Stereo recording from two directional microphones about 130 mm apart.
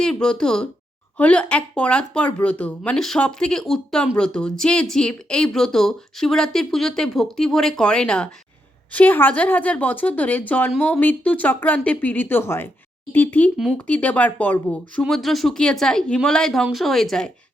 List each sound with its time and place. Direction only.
0.0 s speech: 5° left (ahead or behind)
15.0 s speech: centre (ahead or behind)